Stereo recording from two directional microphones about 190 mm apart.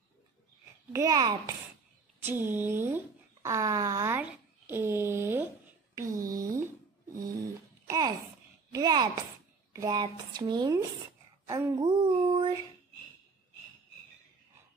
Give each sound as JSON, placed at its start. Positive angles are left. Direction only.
{"t": 0.9, "sound": "speech", "side_deg": -20}
{"t": 7.8, "sound": "babbling", "side_deg": -20}
{"t": 8.7, "sound": "speech", "side_deg": -20}